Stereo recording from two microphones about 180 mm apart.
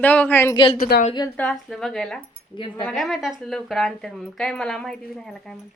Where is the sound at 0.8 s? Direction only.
55° left (ahead or behind).